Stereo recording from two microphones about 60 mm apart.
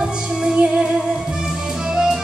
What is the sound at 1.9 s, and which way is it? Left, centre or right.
Music, centre.